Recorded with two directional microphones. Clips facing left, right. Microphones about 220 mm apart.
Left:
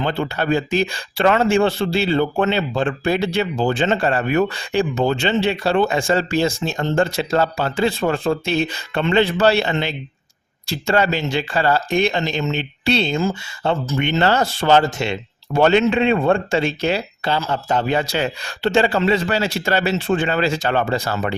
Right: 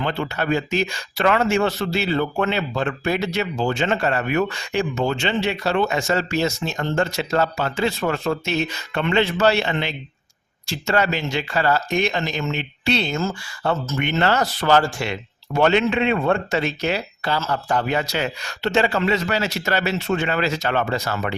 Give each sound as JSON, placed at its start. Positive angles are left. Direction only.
{"t": 0.0, "sound": "speech", "side_deg": 30}
{"t": 13.1, "sound": "speech", "side_deg": 15}
{"t": 14.0, "sound": "speech", "side_deg": 30}